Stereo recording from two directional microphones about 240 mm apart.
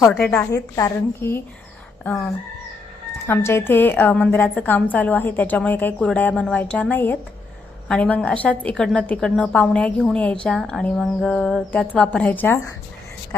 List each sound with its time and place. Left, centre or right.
0.1 s a woman's voice: centre